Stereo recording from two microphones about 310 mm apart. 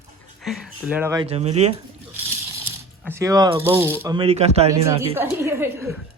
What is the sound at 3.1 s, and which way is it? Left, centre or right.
Speech, centre.